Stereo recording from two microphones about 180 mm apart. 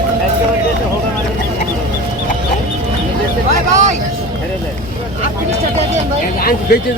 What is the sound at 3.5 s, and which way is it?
Vehicle, 45° right (ahead or behind).